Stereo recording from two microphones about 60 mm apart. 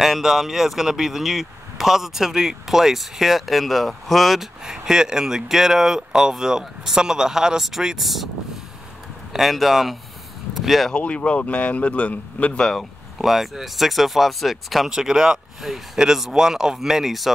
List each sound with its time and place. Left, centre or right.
0.0 s speech: centre
9.3 s speech: centre
10.5 s a sound: centre
10.9 s speech: centre
13.2 s speech: centre